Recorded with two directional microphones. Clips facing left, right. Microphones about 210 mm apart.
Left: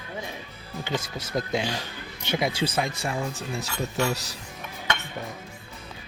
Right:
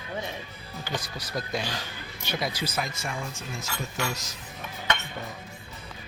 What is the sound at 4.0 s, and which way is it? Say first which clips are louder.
Speech: left 6 dB; 35° left (ahead or behind).